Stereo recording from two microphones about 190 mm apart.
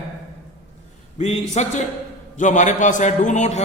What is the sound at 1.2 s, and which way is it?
A man's voice, 35° left (ahead or behind).